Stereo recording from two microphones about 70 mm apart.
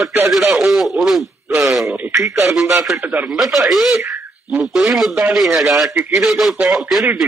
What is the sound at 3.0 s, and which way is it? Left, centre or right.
Speech, right.